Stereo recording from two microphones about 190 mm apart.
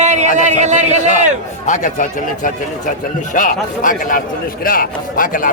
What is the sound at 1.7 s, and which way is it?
A man's voice, 40° left (ahead or behind).